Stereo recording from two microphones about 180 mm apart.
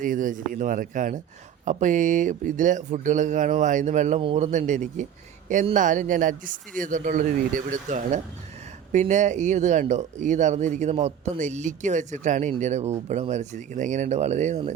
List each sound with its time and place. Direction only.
0.0 s speech: 45° right (ahead or behind)
4.2 s a man's voice: 30° right (ahead or behind)
4.5 s speech: 45° right (ahead or behind)